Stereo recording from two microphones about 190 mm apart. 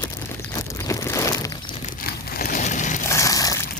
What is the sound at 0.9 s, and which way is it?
Crumpling, 15° left (ahead or behind).